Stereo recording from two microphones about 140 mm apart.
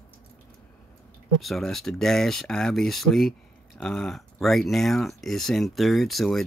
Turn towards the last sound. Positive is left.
turn(degrees=0)  # may be behind; listen again after turning